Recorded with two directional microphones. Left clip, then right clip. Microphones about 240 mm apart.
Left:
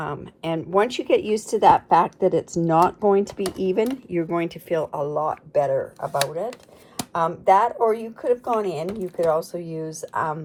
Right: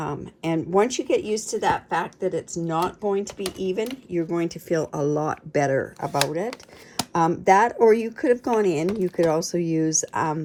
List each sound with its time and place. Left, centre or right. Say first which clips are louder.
0.0 s speech: even; centre; by 6.1 s right
6.5 s speech: right 1 dB; centre
7.1 s speech: even; right
9.8 s speech: right 8 dB; centre
10.1 s speech: even; right